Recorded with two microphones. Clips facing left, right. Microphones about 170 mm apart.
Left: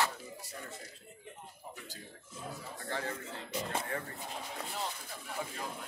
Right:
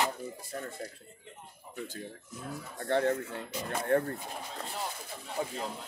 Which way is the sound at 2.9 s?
60° right (ahead or behind).